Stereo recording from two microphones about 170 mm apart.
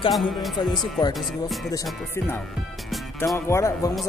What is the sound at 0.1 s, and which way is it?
Speech, centre (ahead or behind).